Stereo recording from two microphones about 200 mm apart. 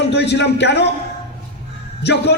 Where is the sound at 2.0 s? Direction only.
60° left (ahead or behind).